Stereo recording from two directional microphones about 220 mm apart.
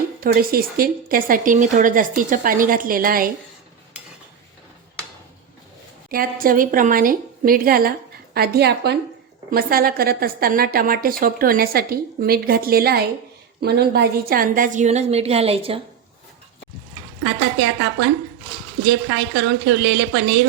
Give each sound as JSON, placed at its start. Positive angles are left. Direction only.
{"t": 0.2, "sound": "speech", "side_deg": -40}
{"t": 6.1, "sound": "a woman's voice", "side_deg": -40}
{"t": 17.2, "sound": "a woman's voice", "side_deg": -55}